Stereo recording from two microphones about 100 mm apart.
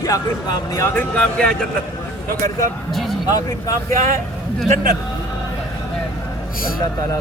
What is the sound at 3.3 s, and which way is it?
Speech, 40° left (ahead or behind).